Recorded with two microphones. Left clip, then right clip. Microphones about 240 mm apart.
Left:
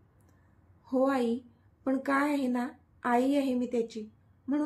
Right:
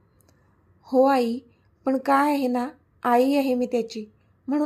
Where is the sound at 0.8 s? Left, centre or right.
Right.